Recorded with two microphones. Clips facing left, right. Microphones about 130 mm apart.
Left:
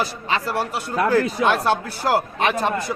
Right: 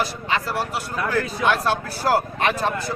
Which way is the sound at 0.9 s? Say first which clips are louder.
Left 6 dB; 30° left (ahead or behind).